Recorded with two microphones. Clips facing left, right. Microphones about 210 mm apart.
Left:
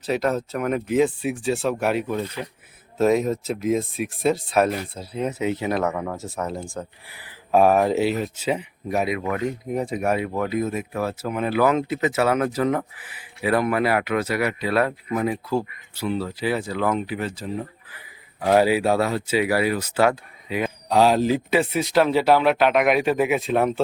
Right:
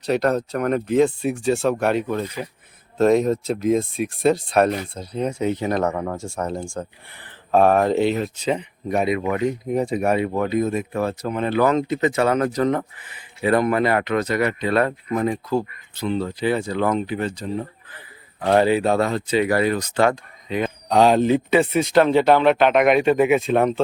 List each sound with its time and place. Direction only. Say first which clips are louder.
0.0 s speech: right 3 dB; centre (ahead or behind)
2.2 s speech: right 2 dB; 10° right (ahead or behind)
3.0 s speech: right 3 dB; 5° left (ahead or behind)
5.8 s speech: right 2 dB; 35° right (ahead or behind)
6.1 s speech: right 2 dB; 5° left (ahead or behind)